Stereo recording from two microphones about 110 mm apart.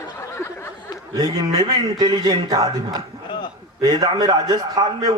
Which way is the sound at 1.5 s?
40° right (ahead or behind).